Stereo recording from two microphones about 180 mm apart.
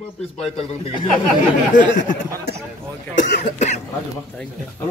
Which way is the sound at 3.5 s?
40° left (ahead or behind).